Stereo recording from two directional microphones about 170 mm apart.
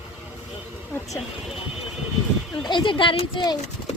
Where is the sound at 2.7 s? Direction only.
30° left (ahead or behind).